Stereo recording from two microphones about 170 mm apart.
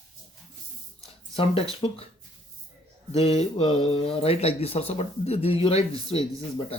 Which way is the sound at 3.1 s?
35° left (ahead or behind).